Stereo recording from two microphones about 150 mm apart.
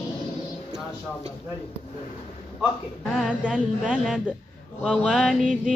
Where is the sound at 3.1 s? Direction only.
5° right (ahead or behind).